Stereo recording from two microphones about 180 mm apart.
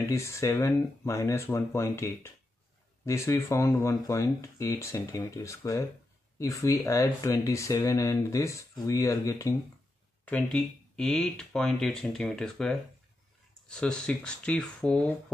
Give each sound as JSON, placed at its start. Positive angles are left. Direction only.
{"t": 0.1, "sound": "speech", "side_deg": 15}
{"t": 10.2, "sound": "speech", "side_deg": 5}